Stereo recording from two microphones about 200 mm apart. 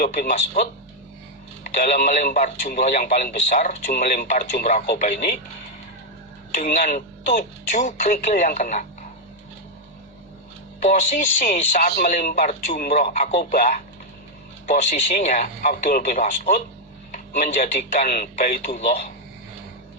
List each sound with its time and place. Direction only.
0.0 s speech: 40° left (ahead or behind)
6.6 s speech: 45° left (ahead or behind)
10.8 s speech: 40° left (ahead or behind)